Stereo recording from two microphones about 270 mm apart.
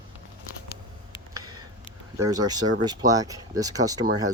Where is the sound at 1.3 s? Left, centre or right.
Centre.